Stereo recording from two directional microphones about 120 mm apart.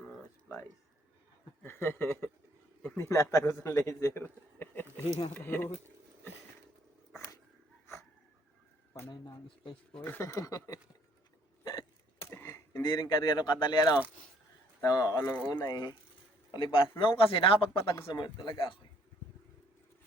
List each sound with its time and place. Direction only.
0.0 s a sound: 5° left (ahead or behind)
0.5 s a man's voice: 20° left (ahead or behind)
9.0 s speech: 40° left (ahead or behind)
9.9 s speech: 15° left (ahead or behind)
10.2 s a man's voice: 30° left (ahead or behind)
11.6 s hiccup: 35° left (ahead or behind)
12.2 s a sound: 20° left (ahead or behind)
12.9 s speech: 35° left (ahead or behind)
15.2 s speech: 20° left (ahead or behind)
15.6 s speech: 35° left (ahead or behind)